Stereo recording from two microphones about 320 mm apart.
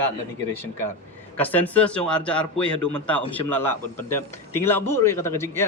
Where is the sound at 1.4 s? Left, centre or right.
Centre.